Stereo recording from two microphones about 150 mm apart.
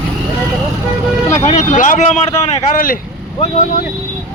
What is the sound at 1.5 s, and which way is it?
Speech, 50° left (ahead or behind).